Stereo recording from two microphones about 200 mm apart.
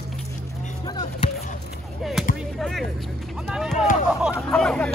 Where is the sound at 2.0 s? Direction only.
Centre (ahead or behind).